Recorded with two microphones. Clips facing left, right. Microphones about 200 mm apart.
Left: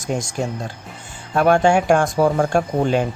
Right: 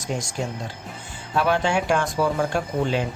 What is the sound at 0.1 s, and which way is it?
Speech, 50° left (ahead or behind).